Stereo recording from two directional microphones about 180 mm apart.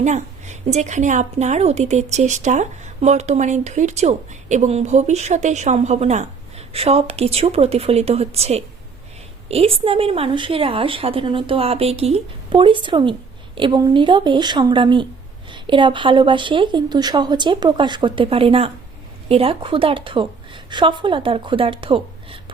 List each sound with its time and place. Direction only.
0.0 s a woman's voice: 40° right (ahead or behind)